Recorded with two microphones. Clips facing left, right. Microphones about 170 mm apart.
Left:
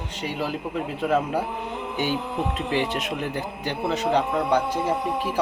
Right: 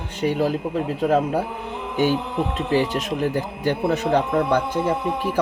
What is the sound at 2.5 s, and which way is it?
A man's voice, 40° right (ahead or behind).